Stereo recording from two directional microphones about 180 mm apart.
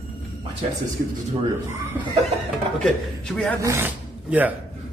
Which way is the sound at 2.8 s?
5° left (ahead or behind).